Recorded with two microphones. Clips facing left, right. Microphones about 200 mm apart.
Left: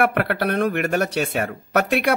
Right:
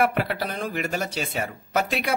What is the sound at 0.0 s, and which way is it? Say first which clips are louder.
Speech: left 3 dB; 60° left (ahead or behind).